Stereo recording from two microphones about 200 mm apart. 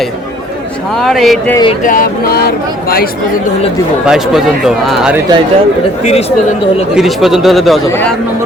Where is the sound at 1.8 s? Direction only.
45° left (ahead or behind).